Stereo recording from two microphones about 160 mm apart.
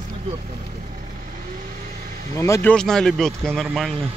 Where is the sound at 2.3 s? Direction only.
20° left (ahead or behind).